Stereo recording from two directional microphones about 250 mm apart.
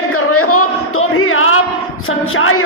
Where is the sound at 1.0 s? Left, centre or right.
Left.